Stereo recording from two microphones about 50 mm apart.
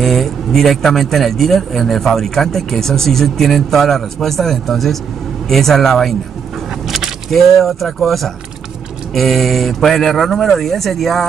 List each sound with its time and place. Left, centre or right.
0.0 s speech: centre